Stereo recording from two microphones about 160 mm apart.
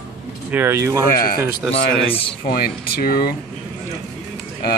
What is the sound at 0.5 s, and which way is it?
Speech, 15° right (ahead or behind).